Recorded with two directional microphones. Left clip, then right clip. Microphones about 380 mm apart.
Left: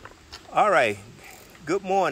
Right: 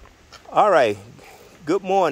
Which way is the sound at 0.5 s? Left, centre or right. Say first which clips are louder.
Right 4 dB; centre.